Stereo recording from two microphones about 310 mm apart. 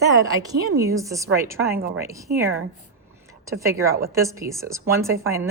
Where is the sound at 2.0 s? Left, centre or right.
Centre.